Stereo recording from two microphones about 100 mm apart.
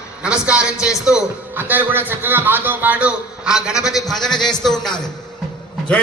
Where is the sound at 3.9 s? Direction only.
5° left (ahead or behind).